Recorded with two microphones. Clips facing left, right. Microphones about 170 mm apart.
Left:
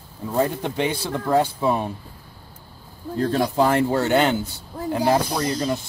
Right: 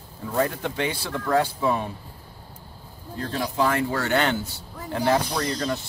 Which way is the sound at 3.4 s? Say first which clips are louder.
Left 3 dB; 30° left (ahead or behind).